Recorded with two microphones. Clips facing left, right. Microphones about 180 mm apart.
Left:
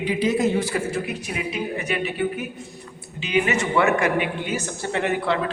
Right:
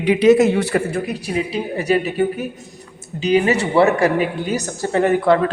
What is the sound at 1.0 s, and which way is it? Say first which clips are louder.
Speech: right 6 dB; 35° right (ahead or behind).